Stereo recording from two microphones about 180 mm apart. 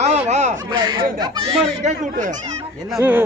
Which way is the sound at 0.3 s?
40° right (ahead or behind).